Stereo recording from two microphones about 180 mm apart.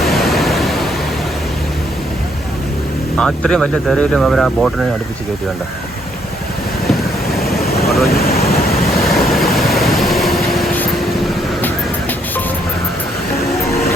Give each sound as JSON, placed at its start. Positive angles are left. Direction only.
{"t": 0.0, "sound": "pink noise", "side_deg": 0}
{"t": 3.2, "sound": "speech", "side_deg": 5}
{"t": 6.9, "sound": "vehicle", "side_deg": 0}
{"t": 7.9, "sound": "speech", "side_deg": 0}
{"t": 8.2, "sound": "a sound", "side_deg": 60}
{"t": 9.0, "sound": "vehicle", "side_deg": 0}